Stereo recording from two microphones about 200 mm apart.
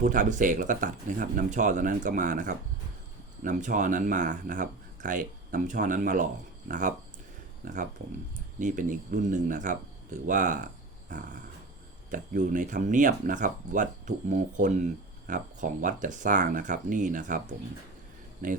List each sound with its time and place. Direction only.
0.0 s speech: 40° right (ahead or behind)
12.1 s speech: 40° right (ahead or behind)
18.4 s speech: 40° right (ahead or behind)